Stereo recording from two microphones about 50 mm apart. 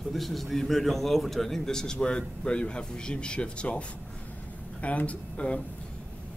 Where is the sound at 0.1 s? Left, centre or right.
Centre; by 3.8 s left.